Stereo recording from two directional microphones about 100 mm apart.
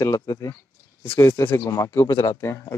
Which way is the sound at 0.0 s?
35° left (ahead or behind).